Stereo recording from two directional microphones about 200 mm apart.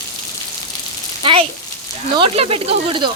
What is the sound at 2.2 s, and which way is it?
Speech, 30° right (ahead or behind).